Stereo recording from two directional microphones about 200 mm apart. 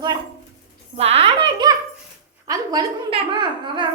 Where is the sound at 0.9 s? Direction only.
30° right (ahead or behind).